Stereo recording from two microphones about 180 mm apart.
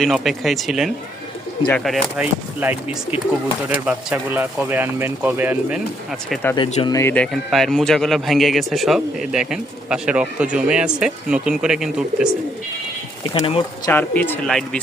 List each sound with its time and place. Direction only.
0.0 s speech: centre (ahead or behind)
6.8 s speech: 15° left (ahead or behind); by 12.3 s 5° right (ahead or behind)
13.3 s speech: 30° left (ahead or behind)
13.9 s speech: 10° left (ahead or behind)